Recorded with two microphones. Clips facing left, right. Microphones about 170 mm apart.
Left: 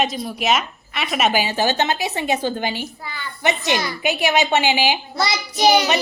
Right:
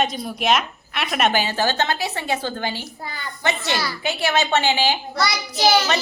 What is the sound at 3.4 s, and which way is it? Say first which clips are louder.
A child's voice: left 3 dB; 20° left (ahead or behind).